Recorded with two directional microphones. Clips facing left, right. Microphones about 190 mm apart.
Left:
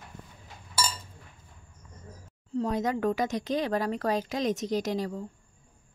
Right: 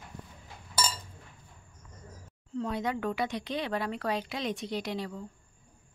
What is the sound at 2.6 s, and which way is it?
Speech, 40° left (ahead or behind).